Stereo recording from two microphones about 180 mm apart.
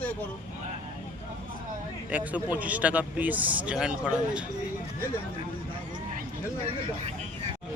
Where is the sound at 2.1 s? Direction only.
10° right (ahead or behind).